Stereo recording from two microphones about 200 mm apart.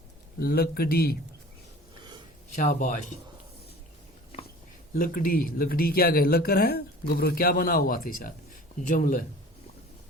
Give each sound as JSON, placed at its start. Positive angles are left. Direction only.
{"t": 0.3, "sound": "speech", "side_deg": 50}
{"t": 2.6, "sound": "a man's voice", "side_deg": 40}
{"t": 4.9, "sound": "speech", "side_deg": 45}